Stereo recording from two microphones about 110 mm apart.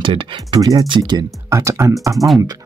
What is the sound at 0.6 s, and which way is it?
Speech, 35° right (ahead or behind).